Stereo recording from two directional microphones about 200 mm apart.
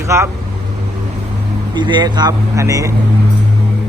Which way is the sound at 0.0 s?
15° right (ahead or behind).